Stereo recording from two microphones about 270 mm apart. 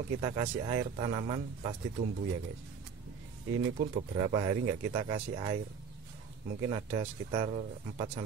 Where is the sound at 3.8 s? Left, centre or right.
Right.